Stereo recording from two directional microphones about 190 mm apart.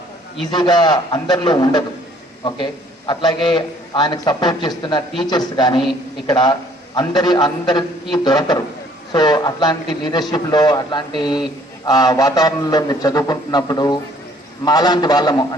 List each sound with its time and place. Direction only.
0.5 s a man's voice: 25° left (ahead or behind)
3.1 s a man's voice: 25° left (ahead or behind)